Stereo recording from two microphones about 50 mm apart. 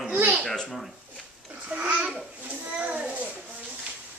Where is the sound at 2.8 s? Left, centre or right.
Right.